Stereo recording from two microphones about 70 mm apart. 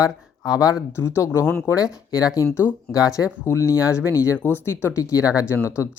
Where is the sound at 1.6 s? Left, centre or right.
Left.